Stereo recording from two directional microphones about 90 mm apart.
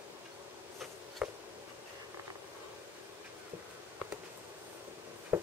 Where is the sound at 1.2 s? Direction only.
10° right (ahead or behind).